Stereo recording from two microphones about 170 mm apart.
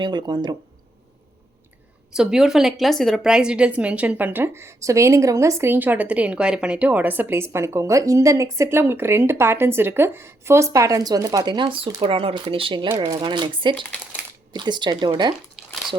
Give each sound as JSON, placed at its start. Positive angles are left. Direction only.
{"t": 0.0, "sound": "speech", "side_deg": -25}
{"t": 2.1, "sound": "a woman's voice", "side_deg": -5}